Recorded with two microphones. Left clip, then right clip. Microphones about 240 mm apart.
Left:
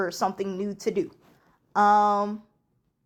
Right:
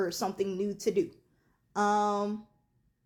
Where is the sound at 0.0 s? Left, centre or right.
Centre.